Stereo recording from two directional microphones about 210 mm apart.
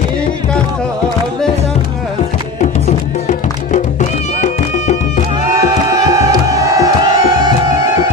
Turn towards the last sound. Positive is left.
turn(degrees=-15)  # may be behind; listen again after turning